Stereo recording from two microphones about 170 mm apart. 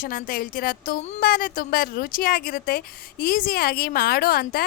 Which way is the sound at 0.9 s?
40° left (ahead or behind).